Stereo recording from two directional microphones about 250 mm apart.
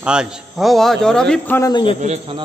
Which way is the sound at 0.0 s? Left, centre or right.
Centre.